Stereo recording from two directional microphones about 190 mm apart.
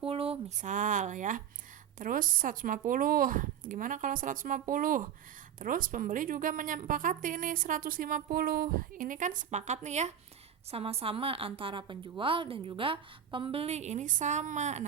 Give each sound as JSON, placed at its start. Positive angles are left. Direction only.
{"t": 0.0, "sound": "a woman's voice", "side_deg": -30}